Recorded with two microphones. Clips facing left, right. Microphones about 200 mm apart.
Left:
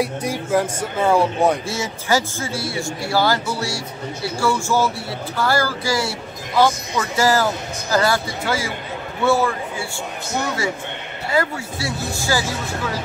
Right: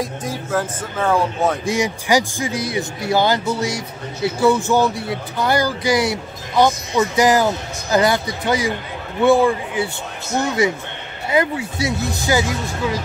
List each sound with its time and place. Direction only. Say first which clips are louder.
0.0 s speech: left 3 dB; 10° left (ahead or behind)
1.7 s speech: right 4 dB; 15° right (ahead or behind)
11.2 s speech: right 3 dB; 20° right (ahead or behind)